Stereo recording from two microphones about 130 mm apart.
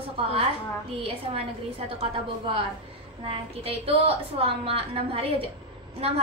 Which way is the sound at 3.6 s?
45° right (ahead or behind).